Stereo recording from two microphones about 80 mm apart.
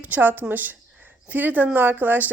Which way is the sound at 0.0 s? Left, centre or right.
Right.